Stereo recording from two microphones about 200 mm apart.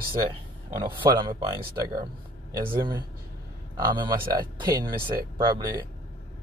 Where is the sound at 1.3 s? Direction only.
45° right (ahead or behind).